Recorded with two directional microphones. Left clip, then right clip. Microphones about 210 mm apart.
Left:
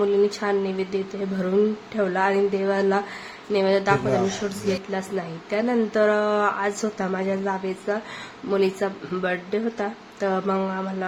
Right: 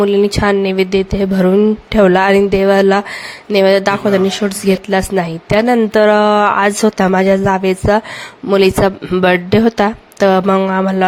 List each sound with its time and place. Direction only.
0.0 s a woman's voice: 45° right (ahead or behind)